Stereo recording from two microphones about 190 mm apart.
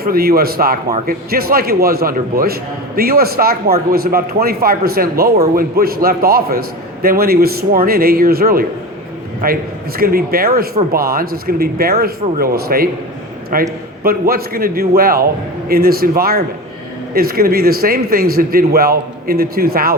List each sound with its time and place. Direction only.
0.0 s a man's voice: 50° right (ahead or behind)